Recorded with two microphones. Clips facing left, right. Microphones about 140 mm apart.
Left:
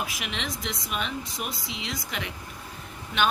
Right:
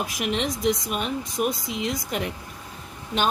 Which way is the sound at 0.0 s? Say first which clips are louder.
Right 7 dB; 45° right (ahead or behind).